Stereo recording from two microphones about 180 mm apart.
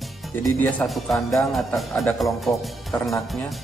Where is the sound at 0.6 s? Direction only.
Centre (ahead or behind).